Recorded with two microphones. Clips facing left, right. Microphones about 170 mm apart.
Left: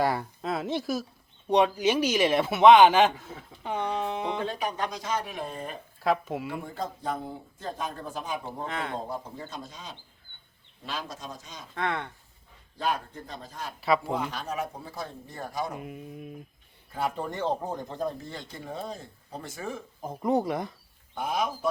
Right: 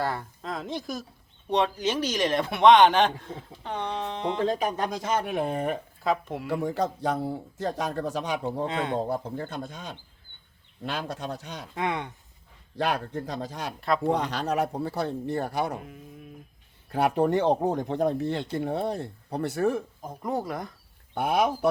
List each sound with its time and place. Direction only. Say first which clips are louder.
0.0 s speech: left 3 dB; 10° left (ahead or behind)
4.4 s speech: right 4 dB; 35° right (ahead or behind); by 5.8 s 70° right (ahead or behind)
6.0 s speech: left 4 dB; centre (ahead or behind)
6.5 s speech: right 7 dB; 80° right
8.4 s speech: right 6 dB; 20° right (ahead or behind)
9.0 s speech: right 6 dB; 60° right (ahead or behind)
11.7 s speech: right 1 dB; 15° right (ahead or behind)
12.7 s speech: right 3 dB; 70° right (ahead or behind)
16.9 s speech: right 8 dB; 70° right (ahead or behind)
20.2 s speech: left 4 dB; 20° left (ahead or behind)
21.2 s speech: right 6 dB; 65° right (ahead or behind)